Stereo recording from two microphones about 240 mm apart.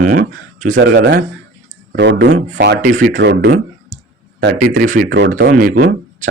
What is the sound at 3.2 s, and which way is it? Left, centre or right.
Speech, right.